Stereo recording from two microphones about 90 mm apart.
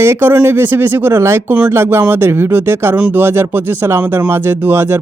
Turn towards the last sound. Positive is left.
turn(degrees=-25)  # may be behind; listen again after turning